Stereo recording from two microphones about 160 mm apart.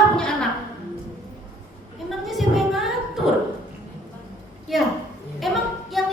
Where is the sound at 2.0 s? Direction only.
Centre (ahead or behind).